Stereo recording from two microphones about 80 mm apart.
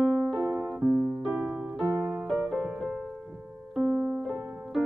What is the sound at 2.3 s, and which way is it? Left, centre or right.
Music, centre.